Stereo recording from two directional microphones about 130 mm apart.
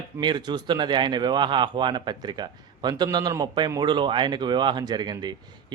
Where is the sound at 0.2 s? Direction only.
35° right (ahead or behind).